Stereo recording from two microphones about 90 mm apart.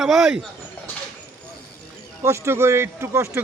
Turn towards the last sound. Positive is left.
turn(degrees=-30)  # may be behind; listen again after turning